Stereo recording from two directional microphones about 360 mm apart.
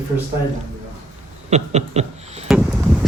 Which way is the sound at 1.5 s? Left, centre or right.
Centre.